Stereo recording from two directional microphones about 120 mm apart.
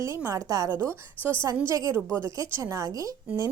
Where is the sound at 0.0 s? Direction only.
25° right (ahead or behind).